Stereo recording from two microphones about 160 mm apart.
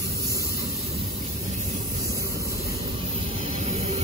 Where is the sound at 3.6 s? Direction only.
40° right (ahead or behind).